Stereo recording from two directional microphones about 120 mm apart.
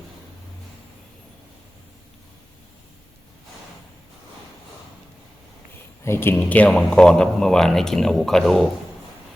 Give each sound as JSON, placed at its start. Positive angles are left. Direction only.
{"t": 6.1, "sound": "a man's voice", "side_deg": 20}